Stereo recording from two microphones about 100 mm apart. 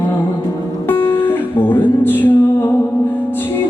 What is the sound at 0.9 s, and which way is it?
Music, 25° left (ahead or behind).